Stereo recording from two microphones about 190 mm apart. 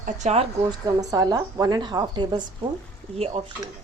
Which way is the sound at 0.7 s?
20° right (ahead or behind).